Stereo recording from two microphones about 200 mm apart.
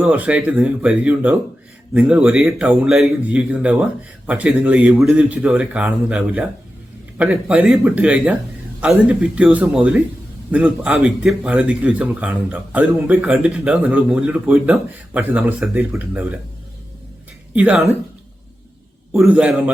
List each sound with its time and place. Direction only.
0.0 s a man's voice: 5° right (ahead or behind)
17.5 s a man's voice: 5° right (ahead or behind)
19.1 s speech: 5° right (ahead or behind)